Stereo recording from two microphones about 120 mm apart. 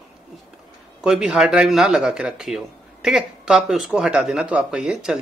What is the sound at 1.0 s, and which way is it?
A man's voice, 5° right (ahead or behind).